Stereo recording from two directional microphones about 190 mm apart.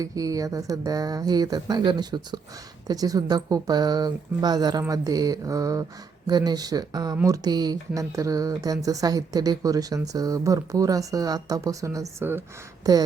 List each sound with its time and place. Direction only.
0.0 s speech: 20° right (ahead or behind)